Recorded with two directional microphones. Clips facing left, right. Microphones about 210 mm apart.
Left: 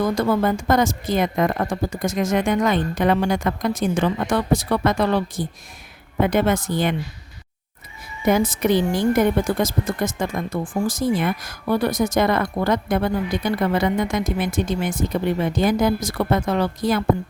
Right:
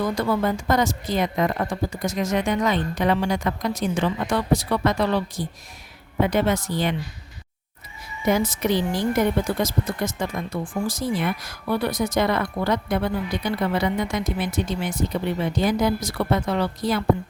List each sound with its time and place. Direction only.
0.0 s a woman's voice: 45° left (ahead or behind)
8.2 s a woman's voice: 50° left (ahead or behind)